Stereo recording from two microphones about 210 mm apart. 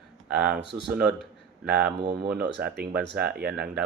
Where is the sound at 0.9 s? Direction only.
5° right (ahead or behind).